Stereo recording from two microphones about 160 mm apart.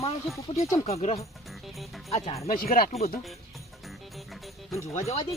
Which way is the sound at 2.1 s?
40° left (ahead or behind).